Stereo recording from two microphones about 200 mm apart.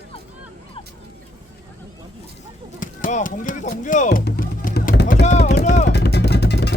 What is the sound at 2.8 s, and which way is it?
Speech, 40° left (ahead or behind).